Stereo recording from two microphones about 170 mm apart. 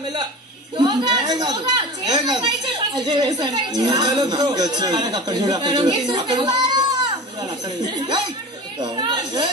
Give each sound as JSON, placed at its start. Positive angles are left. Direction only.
{"t": 0.7, "sound": "a woman's voice", "side_deg": -25}
{"t": 8.7, "sound": "chatter", "side_deg": -30}